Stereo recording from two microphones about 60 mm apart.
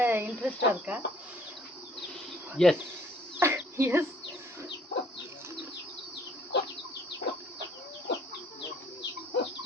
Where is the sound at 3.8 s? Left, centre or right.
Right.